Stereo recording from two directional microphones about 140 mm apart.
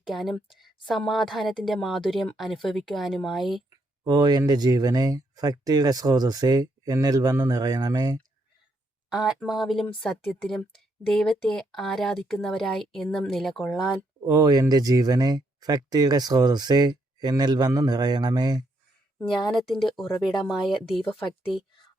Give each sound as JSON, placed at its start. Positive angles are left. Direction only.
{"t": 0.1, "sound": "speech", "side_deg": 0}
{"t": 3.7, "sound": "speech", "side_deg": -30}
{"t": 9.0, "sound": "speech", "side_deg": -5}
{"t": 14.3, "sound": "speech", "side_deg": -25}
{"t": 19.5, "sound": "speech", "side_deg": 0}
{"t": 21.0, "sound": "speech", "side_deg": 10}